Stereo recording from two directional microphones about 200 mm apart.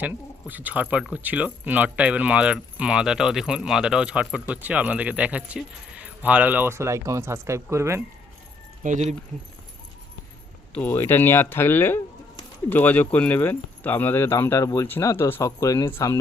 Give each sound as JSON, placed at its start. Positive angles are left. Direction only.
{"t": 0.0, "sound": "speech", "side_deg": -10}
{"t": 8.8, "sound": "speech", "side_deg": -35}
{"t": 10.8, "sound": "speech", "side_deg": 10}